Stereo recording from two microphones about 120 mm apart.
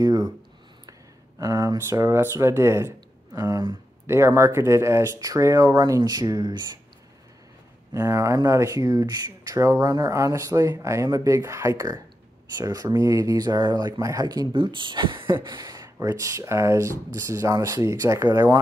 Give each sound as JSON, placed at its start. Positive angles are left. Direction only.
{"t": 0.0, "sound": "a sound", "side_deg": -30}
{"t": 1.4, "sound": "speech", "side_deg": -30}
{"t": 7.9, "sound": "speech", "side_deg": -25}